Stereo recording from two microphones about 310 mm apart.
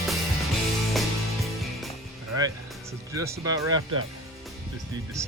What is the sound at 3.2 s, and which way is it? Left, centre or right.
Speech, centre.